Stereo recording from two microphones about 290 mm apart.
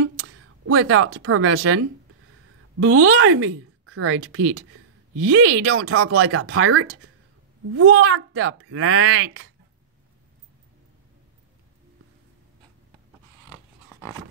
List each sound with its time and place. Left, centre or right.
0.0 s speech: right